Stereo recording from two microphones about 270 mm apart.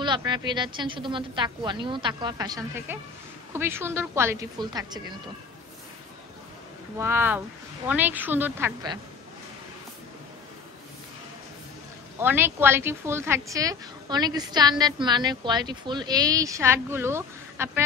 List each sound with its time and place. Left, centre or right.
0.0 s a woman's voice: centre
7.0 s a woman's voice: centre
12.2 s a woman's voice: centre